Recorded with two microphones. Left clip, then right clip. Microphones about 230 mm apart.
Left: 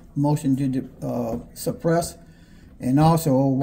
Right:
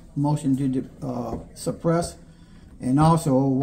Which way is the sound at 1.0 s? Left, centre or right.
Left.